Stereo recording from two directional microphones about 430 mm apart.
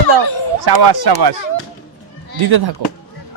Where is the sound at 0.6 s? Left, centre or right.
Right.